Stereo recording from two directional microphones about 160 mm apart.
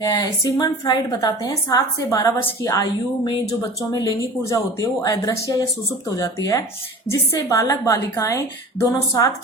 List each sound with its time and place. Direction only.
0.0 s a woman's voice: 20° left (ahead or behind)